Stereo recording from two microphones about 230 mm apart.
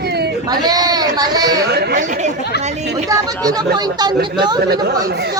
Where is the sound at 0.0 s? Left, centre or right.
Right.